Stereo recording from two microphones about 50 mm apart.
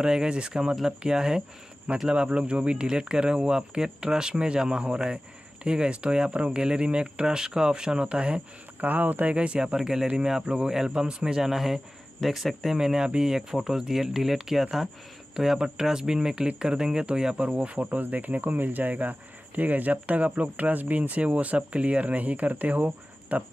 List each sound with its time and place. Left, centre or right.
0.0 s speech: centre
8.8 s speech: right
9.3 s speech: right
9.8 s speech: centre
12.7 s speech: centre
17.6 s speech: right